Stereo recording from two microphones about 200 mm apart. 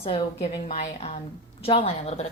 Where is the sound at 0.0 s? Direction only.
25° left (ahead or behind).